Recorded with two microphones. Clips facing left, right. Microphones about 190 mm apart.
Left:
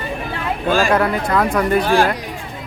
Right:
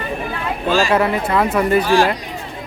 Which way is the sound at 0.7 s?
50° left (ahead or behind).